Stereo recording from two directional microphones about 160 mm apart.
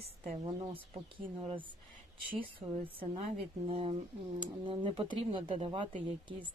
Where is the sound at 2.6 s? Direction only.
35° right (ahead or behind).